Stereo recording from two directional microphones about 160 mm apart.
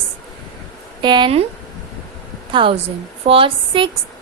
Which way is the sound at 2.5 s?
35° right (ahead or behind).